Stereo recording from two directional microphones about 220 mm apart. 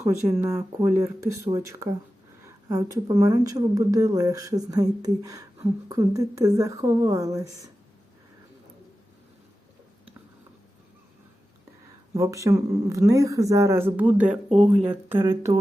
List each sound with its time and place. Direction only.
0.0 s speech: 10° right (ahead or behind)
12.1 s speech: 15° right (ahead or behind)
15.5 s speech: 15° right (ahead or behind)